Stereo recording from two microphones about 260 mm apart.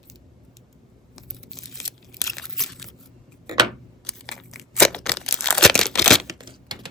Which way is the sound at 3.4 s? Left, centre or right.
Centre.